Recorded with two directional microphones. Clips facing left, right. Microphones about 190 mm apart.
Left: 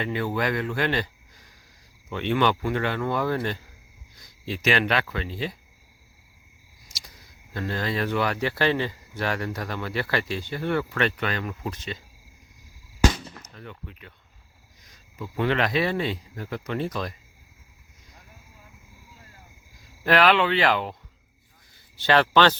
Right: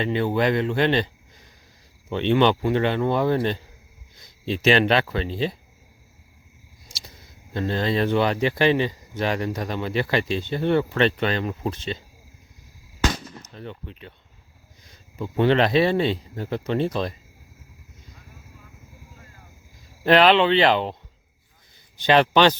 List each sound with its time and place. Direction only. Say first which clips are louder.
0.0 s speech: right 5 dB; 25° right (ahead or behind)
6.8 s a sound: right 4 dB; 25° right (ahead or behind)
7.5 s speech: right 5 dB; 25° right (ahead or behind)
13.6 s speech: right 6 dB; 30° right (ahead or behind)
20.1 s speech: right 4 dB; 25° right (ahead or behind)
21.9 s a man's voice: right 2 dB; 15° right (ahead or behind)